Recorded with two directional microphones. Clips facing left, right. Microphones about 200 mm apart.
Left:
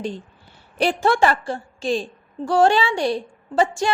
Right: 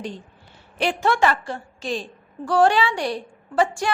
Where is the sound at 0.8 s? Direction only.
35° left (ahead or behind).